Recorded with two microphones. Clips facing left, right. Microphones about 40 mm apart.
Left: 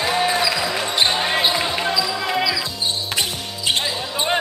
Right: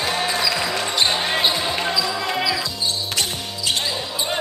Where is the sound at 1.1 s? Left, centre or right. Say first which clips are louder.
Left 1 dB; centre.